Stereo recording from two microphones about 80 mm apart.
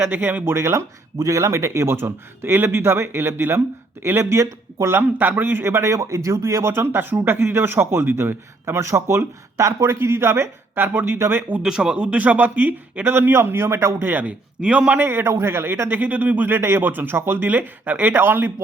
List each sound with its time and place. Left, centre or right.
0.0 s speech: right
11.6 s speech: centre
15.0 s speech: right